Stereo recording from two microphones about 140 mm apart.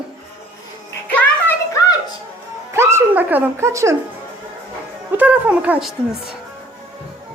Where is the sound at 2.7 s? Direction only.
15° right (ahead or behind).